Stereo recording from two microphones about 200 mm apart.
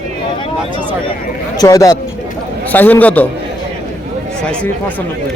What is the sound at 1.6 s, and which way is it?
Speech, 15° left (ahead or behind).